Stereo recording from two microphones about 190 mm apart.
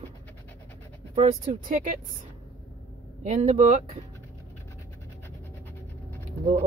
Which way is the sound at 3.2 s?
35° right (ahead or behind).